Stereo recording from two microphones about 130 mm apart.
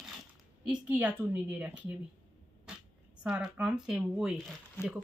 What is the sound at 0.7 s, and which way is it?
Speech, 10° right (ahead or behind).